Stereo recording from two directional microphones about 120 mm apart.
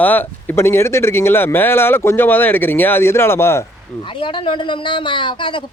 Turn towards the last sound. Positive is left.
turn(degrees=45)  # may be behind; listen again after turning